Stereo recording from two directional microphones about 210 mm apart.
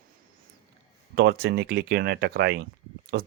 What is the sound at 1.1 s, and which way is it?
Speech, 50° right (ahead or behind).